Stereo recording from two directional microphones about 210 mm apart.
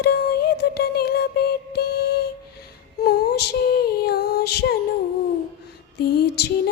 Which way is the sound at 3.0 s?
50° left (ahead or behind).